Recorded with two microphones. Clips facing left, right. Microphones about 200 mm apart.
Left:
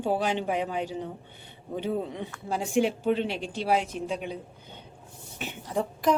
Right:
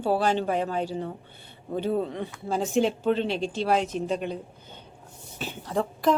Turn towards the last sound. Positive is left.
turn(degrees=20)  # may be behind; listen again after turning